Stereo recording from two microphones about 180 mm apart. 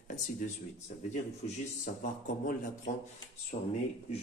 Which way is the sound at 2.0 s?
45° left (ahead or behind).